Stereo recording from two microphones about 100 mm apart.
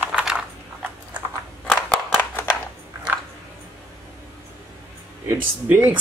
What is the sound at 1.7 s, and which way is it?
Scissors, 15° left (ahead or behind).